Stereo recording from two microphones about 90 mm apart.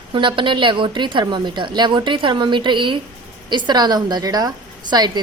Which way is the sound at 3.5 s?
50° right (ahead or behind).